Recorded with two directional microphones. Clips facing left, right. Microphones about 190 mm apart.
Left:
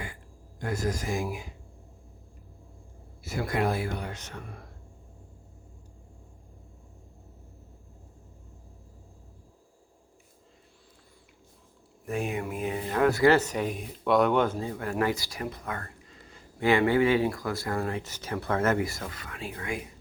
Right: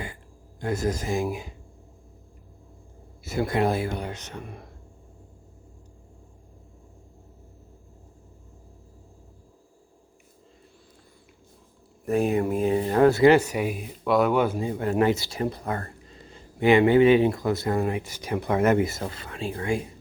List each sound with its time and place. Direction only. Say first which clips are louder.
0.7 s speech: right 4 dB; 25° right (ahead or behind)
3.2 s speech: right 4 dB; 25° right (ahead or behind)
12.0 s speech: right 8 dB; 35° right (ahead or behind)
13.3 s speech: right 4 dB; 10° right (ahead or behind); by 19.9 s 30° right (ahead or behind)